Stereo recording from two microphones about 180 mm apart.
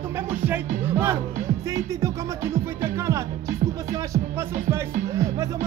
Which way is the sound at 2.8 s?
15° right (ahead or behind).